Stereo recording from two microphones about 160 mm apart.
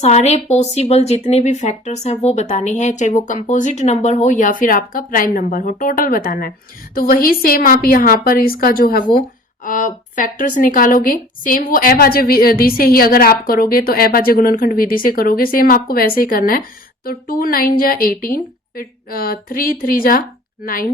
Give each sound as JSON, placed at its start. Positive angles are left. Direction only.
{"t": 0.0, "sound": "a woman's voice", "side_deg": 45}
{"t": 9.6, "sound": "a woman's voice", "side_deg": 55}